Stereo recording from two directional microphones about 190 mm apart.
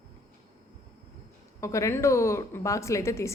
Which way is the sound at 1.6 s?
15° left (ahead or behind).